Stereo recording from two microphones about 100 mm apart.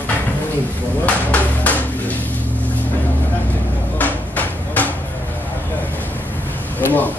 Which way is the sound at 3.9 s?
15° left (ahead or behind).